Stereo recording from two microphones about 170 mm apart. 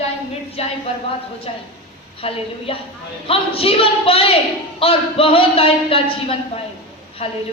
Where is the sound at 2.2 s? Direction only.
35° left (ahead or behind).